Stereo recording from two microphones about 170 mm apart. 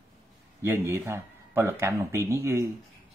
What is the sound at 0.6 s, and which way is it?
Speech, 15° right (ahead or behind).